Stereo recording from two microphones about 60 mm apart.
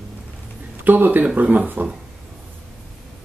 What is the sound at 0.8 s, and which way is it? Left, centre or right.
Speech, right.